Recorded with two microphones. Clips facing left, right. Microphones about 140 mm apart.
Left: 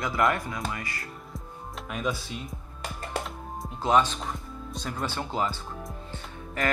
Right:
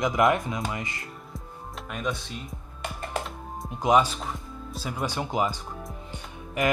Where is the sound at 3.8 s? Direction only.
10° right (ahead or behind).